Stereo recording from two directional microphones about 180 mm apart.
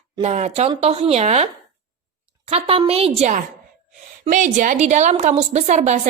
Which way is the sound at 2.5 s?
30° right (ahead or behind).